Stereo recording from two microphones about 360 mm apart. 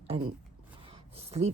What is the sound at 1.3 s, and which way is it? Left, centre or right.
Speech, centre.